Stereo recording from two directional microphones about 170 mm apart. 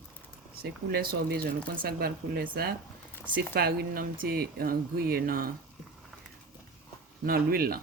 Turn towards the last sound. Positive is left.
turn(degrees=-60)  # may be behind; listen again after turning